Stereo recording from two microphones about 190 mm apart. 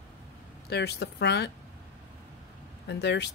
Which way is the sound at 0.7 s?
60° left (ahead or behind).